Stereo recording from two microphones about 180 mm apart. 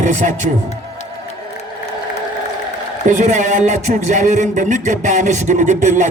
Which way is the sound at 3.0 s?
40° right (ahead or behind).